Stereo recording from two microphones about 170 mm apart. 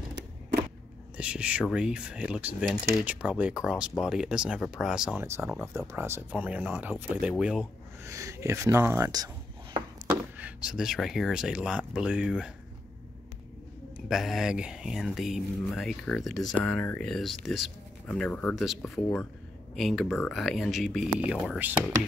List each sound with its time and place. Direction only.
1.1 s speech: 5° right (ahead or behind)
5.7 s speech: 15° right (ahead or behind)
8.0 s speech: 20° right (ahead or behind)
10.0 s speech: 10° right (ahead or behind)
14.0 s speech: centre (ahead or behind)